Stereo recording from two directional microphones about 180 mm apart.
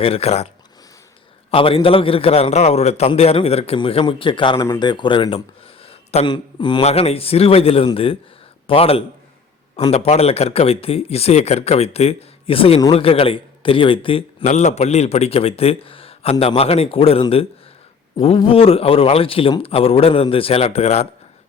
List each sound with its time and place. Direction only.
0.0 s a man's voice: 35° left (ahead or behind)